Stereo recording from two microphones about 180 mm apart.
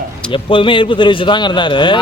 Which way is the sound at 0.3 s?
30° left (ahead or behind).